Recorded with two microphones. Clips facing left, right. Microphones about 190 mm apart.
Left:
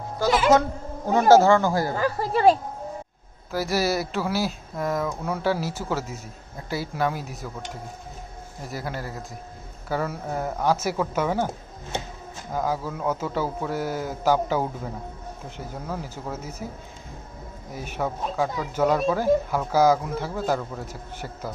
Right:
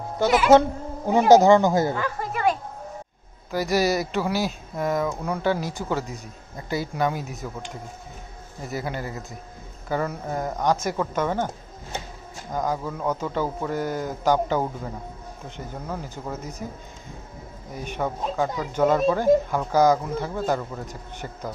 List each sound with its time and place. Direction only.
0.5 s speech: 25° right (ahead or behind)
2.0 s a sound: 35° left (ahead or behind)
3.5 s speech: centre (ahead or behind)
8.6 s speech: centre (ahead or behind)
17.7 s speech: 5° left (ahead or behind)